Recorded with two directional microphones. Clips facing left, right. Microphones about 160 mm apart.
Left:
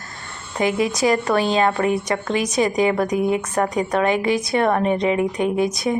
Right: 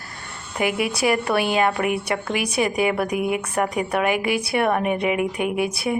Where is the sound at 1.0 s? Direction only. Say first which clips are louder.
Left 2 dB; 35° left (ahead or behind).